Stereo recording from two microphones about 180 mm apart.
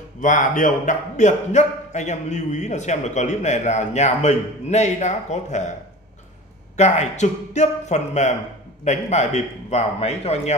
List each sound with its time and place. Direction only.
0.2 s speech: 45° left (ahead or behind)
6.8 s speech: 40° left (ahead or behind)